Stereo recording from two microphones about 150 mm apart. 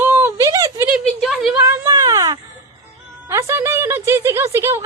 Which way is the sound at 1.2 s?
Centre (ahead or behind).